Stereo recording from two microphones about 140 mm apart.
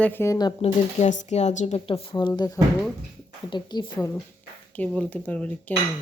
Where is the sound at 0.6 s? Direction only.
50° left (ahead or behind); by 4.0 s 30° left (ahead or behind).